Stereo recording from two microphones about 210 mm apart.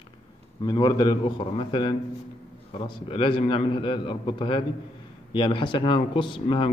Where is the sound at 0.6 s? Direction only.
20° left (ahead or behind).